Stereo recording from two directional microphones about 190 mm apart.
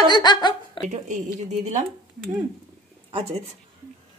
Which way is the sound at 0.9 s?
40° right (ahead or behind).